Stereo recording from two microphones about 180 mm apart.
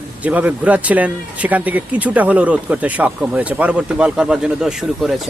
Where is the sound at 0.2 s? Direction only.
10° right (ahead or behind).